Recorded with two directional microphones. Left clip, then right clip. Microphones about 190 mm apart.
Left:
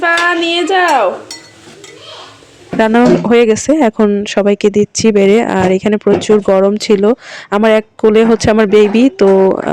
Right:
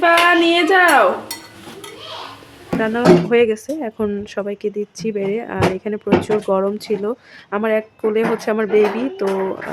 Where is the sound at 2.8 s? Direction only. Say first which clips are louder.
Left 5 dB; 40° left (ahead or behind).